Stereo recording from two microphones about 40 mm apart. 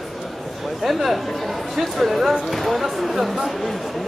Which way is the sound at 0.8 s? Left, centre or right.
Centre.